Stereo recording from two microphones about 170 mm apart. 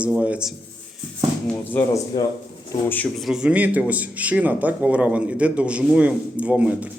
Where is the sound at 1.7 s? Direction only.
15° left (ahead or behind).